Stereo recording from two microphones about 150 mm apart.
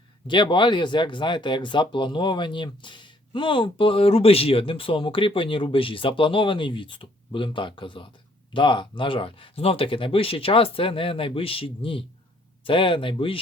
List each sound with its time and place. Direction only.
0.3 s speech: 30° left (ahead or behind)